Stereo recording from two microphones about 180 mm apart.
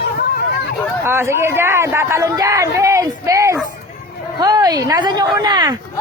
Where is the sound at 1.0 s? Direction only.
15° right (ahead or behind).